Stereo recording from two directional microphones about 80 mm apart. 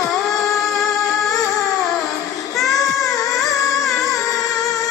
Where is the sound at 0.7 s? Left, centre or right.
Centre.